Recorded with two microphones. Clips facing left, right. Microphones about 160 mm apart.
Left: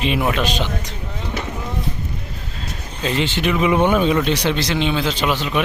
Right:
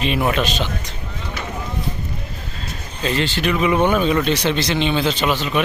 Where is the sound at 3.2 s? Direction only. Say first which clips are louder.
Left 1 dB; 20° left (ahead or behind).